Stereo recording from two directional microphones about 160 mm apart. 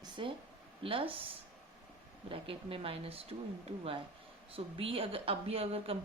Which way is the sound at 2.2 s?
35° right (ahead or behind).